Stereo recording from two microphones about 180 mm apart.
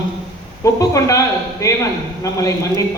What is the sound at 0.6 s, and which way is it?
A man's voice, 15° left (ahead or behind).